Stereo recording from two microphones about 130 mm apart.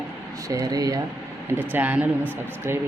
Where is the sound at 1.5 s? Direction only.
15° right (ahead or behind).